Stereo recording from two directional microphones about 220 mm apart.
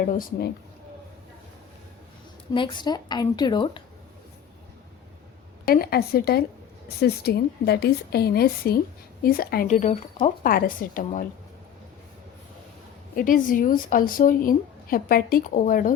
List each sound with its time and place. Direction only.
0.0 s a woman's voice: 40° left (ahead or behind)
2.5 s a woman's voice: 20° left (ahead or behind)
5.6 s a woman's voice: 40° left (ahead or behind)
13.1 s a woman's voice: 40° left (ahead or behind)